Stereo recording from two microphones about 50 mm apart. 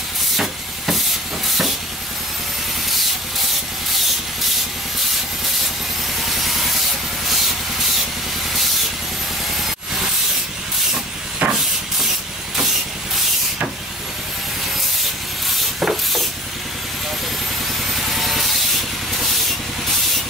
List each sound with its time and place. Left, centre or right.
0.4 s steam: centre
6.2 s rub: centre
9.6 s steam: centre
11.4 s a sound: right
15.8 s a sound: centre
17.9 s rub: centre